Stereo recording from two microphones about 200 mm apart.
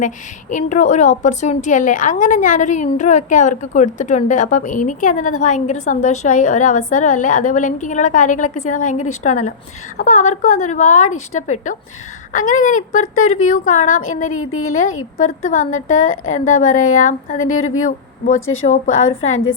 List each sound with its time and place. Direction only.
0.5 s a woman's voice: 40° left (ahead or behind)
14.0 s speech: 90° left
15.4 s a woman's voice: 40° left (ahead or behind)
16.0 s speech: 90° left
16.6 s a woman's voice: 40° left (ahead or behind)
17.4 s a woman's voice: 90° left